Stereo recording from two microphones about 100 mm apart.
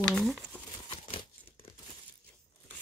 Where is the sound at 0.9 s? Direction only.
65° left (ahead or behind).